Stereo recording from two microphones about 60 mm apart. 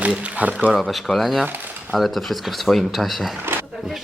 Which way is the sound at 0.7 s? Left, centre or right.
Centre.